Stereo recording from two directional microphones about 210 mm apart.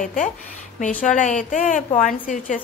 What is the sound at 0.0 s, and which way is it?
A woman's voice, 40° left (ahead or behind).